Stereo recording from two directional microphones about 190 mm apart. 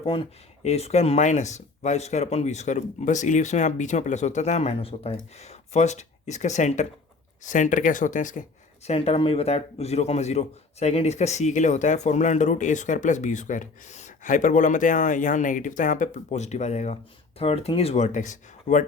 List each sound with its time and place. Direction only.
0.0 s a man's voice: 30° left (ahead or behind)
8.9 s a man's voice: 30° left (ahead or behind)